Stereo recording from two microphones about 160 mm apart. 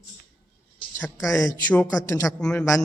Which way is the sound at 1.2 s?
20° left (ahead or behind).